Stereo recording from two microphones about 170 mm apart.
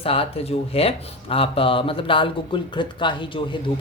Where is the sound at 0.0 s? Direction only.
35° left (ahead or behind).